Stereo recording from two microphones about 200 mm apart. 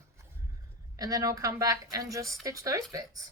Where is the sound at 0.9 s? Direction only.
15° right (ahead or behind).